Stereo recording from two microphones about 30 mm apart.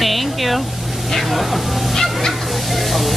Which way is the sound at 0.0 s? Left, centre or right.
Centre.